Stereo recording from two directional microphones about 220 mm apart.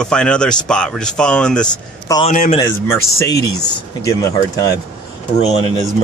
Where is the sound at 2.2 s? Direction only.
35° left (ahead or behind).